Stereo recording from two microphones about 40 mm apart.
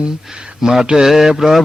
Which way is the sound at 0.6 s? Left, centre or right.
Centre.